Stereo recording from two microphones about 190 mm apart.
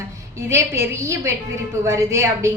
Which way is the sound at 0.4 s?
15° right (ahead or behind).